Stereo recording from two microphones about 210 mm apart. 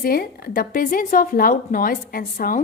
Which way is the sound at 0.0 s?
45° left (ahead or behind).